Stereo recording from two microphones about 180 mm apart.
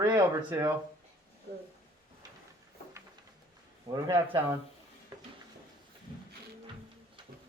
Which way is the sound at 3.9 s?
20° right (ahead or behind).